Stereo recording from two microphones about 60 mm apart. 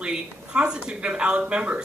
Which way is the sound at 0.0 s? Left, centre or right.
Centre.